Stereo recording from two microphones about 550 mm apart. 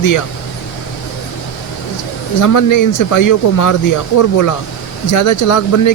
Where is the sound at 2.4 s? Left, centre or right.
Left.